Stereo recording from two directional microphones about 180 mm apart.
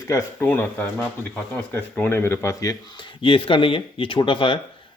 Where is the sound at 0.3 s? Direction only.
10° left (ahead or behind).